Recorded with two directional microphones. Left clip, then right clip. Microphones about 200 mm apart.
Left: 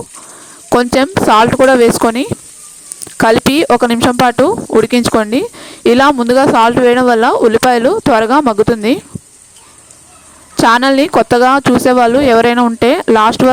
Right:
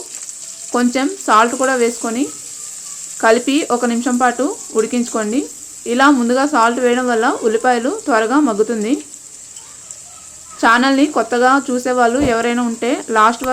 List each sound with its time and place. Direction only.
0.8 s speech: 55° left (ahead or behind)
3.2 s speech: 55° left (ahead or behind)
10.6 s speech: 55° left (ahead or behind)